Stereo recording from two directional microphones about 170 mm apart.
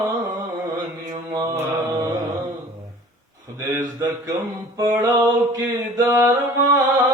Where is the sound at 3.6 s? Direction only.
20° right (ahead or behind).